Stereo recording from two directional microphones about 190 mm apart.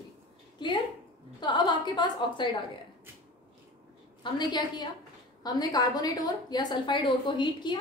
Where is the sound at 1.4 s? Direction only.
25° left (ahead or behind).